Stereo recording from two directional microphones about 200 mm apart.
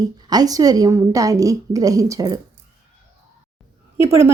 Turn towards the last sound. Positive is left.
turn(degrees=30)  # may be behind; listen again after turning